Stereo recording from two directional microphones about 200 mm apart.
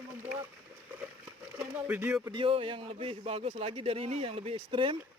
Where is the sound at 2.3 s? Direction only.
25° right (ahead or behind).